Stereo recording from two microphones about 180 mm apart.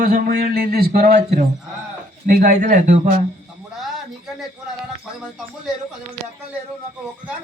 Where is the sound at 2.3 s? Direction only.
50° right (ahead or behind).